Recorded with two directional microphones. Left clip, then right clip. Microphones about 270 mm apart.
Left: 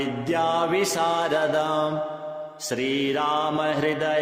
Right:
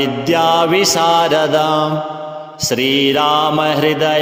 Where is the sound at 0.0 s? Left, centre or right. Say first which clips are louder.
Right 10 dB; right.